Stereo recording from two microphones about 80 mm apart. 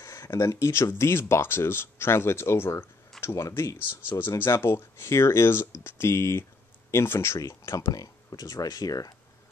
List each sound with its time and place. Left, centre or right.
0.0 s speech: left
3.2 s a sound: left
3.4 s speech: left
7.9 s speech: left